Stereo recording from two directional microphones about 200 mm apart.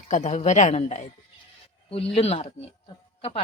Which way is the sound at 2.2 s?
30° left (ahead or behind).